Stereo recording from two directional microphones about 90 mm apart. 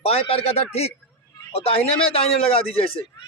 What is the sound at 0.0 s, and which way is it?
Speech, 90° left.